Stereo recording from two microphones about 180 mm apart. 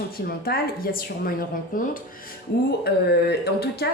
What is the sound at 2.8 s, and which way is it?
Speech, 65° left (ahead or behind).